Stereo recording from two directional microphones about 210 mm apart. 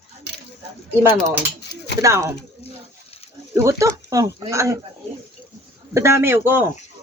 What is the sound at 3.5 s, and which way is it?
Speech, 15° right (ahead or behind).